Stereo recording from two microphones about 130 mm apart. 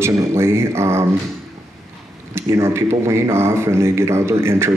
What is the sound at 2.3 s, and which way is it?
A man's voice, 20° right (ahead or behind).